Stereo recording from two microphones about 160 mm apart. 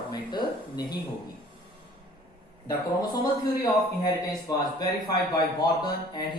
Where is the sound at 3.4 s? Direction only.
25° left (ahead or behind).